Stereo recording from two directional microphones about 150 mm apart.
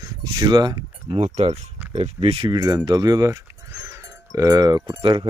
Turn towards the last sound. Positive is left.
turn(degrees=-35)  # may be behind; listen again after turning